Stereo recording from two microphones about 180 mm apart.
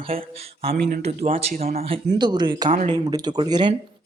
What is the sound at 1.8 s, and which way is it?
A man's voice, 30° right (ahead or behind).